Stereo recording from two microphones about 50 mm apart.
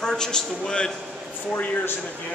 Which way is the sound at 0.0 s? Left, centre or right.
Centre.